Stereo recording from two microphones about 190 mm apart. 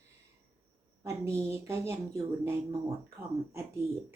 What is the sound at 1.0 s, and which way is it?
Speech, 15° right (ahead or behind).